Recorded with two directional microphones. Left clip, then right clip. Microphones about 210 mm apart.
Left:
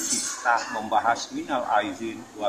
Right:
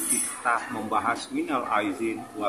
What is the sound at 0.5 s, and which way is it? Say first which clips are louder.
Speech: left 2 dB; 5° right (ahead or behind).